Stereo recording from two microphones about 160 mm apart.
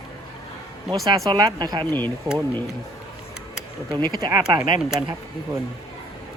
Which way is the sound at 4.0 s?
25° right (ahead or behind).